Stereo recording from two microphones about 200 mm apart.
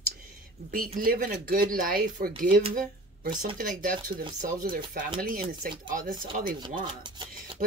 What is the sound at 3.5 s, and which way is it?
Speech, 45° right (ahead or behind).